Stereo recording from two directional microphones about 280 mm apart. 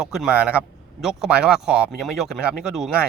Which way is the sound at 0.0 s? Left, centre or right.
Centre.